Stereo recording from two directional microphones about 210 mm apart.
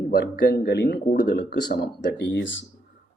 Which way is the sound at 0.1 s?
50° left (ahead or behind).